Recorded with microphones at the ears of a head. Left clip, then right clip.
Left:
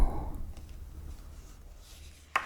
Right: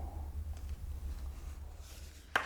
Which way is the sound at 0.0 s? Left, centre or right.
Left.